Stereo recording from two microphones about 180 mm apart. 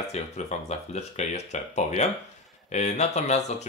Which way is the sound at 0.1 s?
40° left (ahead or behind).